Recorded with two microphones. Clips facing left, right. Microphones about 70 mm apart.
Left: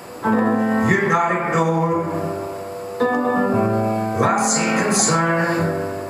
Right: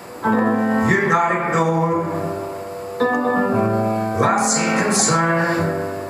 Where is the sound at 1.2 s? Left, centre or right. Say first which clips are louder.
Right 1 dB; centre.